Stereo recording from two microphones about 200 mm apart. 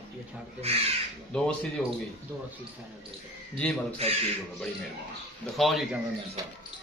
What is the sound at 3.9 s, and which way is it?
Speech, 30° right (ahead or behind).